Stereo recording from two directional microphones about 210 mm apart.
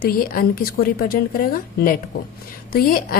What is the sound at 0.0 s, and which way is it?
A woman's voice, 45° left (ahead or behind).